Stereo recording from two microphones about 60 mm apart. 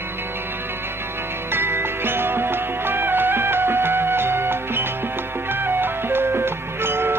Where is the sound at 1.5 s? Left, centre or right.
Right.